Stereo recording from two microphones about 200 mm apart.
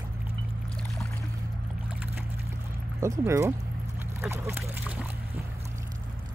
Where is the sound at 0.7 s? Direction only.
Centre (ahead or behind).